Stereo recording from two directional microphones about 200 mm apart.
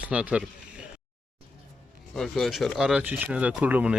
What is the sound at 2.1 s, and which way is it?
Speech, centre (ahead or behind).